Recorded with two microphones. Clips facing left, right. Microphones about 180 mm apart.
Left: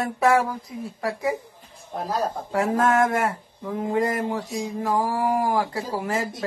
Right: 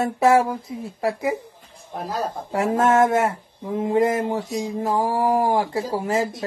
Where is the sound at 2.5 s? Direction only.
25° right (ahead or behind).